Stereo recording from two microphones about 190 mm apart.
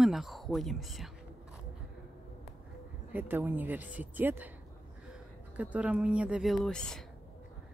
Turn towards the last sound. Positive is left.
turn(degrees=5)  # may be behind; listen again after turning